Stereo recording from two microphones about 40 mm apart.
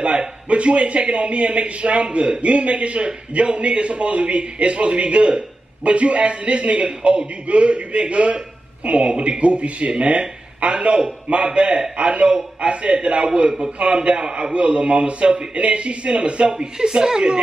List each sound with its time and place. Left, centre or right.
0.5 s a man's voice: right